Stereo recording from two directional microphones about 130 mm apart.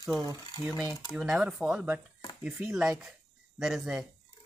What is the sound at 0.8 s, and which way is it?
Speech, 25° left (ahead or behind).